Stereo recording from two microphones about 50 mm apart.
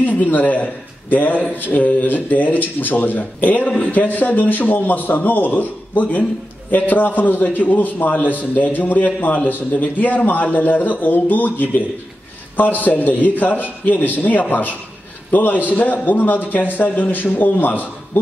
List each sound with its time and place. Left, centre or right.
0.0 s a man's voice: left
12.8 s a man's voice: left